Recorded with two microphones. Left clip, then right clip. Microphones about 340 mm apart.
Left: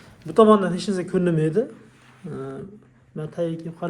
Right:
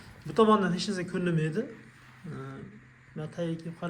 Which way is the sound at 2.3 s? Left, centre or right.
Left.